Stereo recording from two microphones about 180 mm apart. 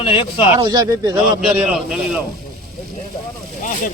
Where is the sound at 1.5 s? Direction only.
5° right (ahead or behind).